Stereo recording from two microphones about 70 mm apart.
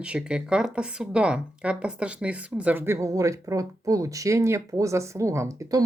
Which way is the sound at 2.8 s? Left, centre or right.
Right.